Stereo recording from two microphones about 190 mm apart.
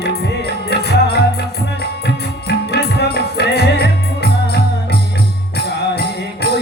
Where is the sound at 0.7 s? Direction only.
60° left (ahead or behind).